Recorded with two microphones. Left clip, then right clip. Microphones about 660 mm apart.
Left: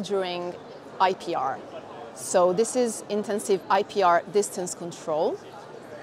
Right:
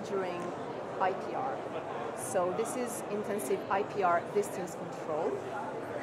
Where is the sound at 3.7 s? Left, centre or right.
Left.